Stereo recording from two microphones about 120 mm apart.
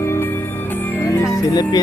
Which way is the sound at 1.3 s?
35° left (ahead or behind).